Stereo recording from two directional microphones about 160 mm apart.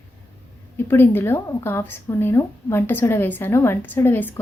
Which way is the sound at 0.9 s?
15° left (ahead or behind).